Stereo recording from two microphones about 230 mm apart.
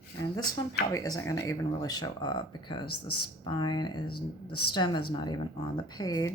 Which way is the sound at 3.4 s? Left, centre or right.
Centre.